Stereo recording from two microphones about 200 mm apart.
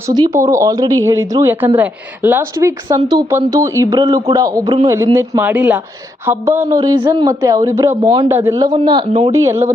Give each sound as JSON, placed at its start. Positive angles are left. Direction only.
{"t": 0.1, "sound": "a woman's voice", "side_deg": -20}
{"t": 9.3, "sound": "a woman's voice", "side_deg": -15}